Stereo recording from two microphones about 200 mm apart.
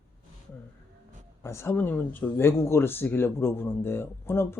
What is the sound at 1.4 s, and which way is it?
Speech, 15° left (ahead or behind).